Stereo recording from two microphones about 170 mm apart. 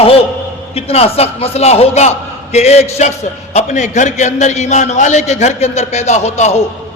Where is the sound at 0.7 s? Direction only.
35° left (ahead or behind).